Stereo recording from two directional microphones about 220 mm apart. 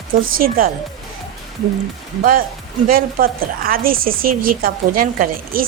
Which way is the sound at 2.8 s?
40° right (ahead or behind).